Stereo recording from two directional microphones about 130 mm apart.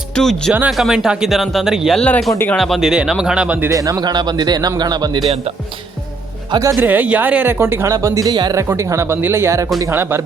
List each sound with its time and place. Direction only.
0.2 s speech: 5° left (ahead or behind)
3.7 s a man's voice: 25° right (ahead or behind)
6.5 s speech: 25° right (ahead or behind)
6.7 s speech: 15° right (ahead or behind)